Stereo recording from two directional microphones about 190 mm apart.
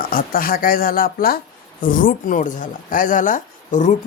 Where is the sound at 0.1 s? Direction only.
50° left (ahead or behind).